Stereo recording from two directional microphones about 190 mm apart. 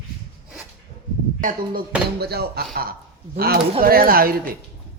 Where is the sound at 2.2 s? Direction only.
55° right (ahead or behind).